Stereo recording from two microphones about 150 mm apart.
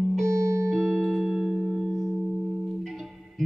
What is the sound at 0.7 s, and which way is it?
Music, 5° left (ahead or behind).